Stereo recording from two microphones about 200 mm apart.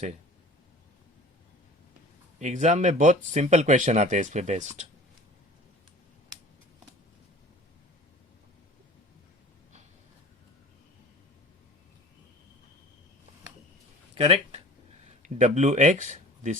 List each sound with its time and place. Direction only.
2.4 s speech: 35° right (ahead or behind)
14.2 s speech: 30° right (ahead or behind)